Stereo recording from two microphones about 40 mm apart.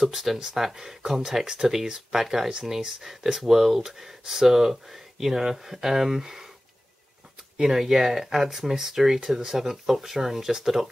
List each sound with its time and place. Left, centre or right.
0.0 s speech: centre
7.5 s speech: centre